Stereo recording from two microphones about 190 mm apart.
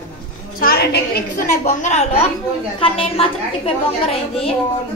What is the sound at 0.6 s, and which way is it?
Speech, 55° left (ahead or behind).